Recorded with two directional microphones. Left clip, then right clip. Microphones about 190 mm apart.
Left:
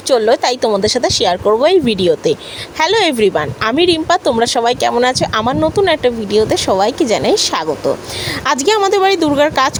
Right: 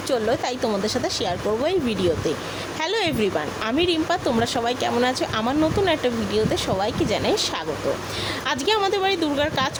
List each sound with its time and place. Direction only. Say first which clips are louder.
0.1 s speech: left 11 dB; 40° left (ahead or behind)